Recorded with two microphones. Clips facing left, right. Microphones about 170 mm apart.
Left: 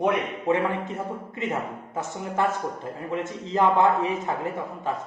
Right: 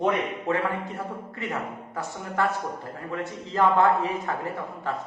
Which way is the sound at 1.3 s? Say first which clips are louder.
Left 3 dB; 20° left (ahead or behind).